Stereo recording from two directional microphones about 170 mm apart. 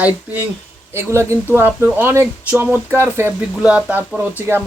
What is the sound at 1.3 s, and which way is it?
Speech, 15° right (ahead or behind).